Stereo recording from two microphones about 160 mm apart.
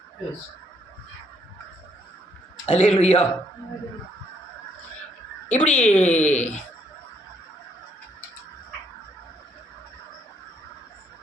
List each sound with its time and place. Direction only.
2.6 s speech: 45° left (ahead or behind)
5.5 s speech: 50° left (ahead or behind)